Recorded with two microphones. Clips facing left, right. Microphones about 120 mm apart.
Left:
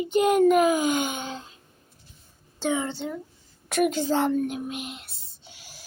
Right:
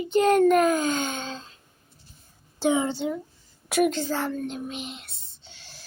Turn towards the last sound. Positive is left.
turn(degrees=10)  # may be behind; listen again after turning